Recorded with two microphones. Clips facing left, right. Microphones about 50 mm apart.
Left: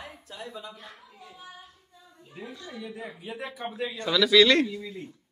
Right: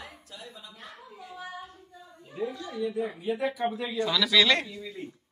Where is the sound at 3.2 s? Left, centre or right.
Centre.